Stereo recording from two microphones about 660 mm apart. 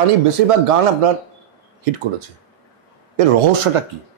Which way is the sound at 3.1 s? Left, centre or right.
Right.